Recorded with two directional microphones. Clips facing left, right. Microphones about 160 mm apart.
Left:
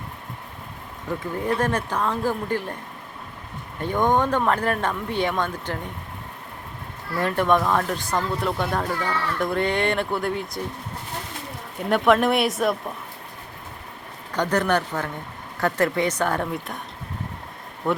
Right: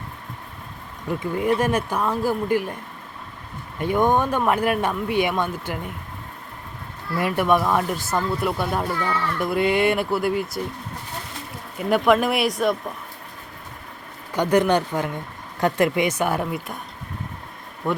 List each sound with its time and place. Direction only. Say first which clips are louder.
1.4 s speech: right 3 dB; 10° right (ahead or behind)
3.8 s speech: right 1 dB; 10° right (ahead or behind)
7.2 s speech: right 1 dB; 10° right (ahead or behind)
11.8 s speech: even; 5° right (ahead or behind)
14.3 s speech: right 3 dB; 15° right (ahead or behind)
17.8 s speech: even; centre (ahead or behind)